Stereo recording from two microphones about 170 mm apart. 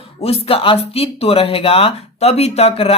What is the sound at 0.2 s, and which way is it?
Speech, 35° left (ahead or behind).